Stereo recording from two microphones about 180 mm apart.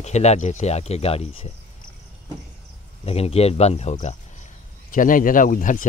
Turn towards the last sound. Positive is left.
turn(degrees=50)  # may be behind; listen again after turning